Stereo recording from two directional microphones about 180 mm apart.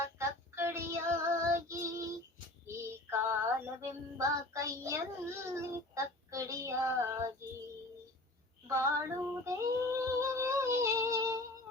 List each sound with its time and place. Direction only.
0.0 s child singing: 15° right (ahead or behind)
2.6 s music: 15° right (ahead or behind)
8.6 s female singing: 15° right (ahead or behind)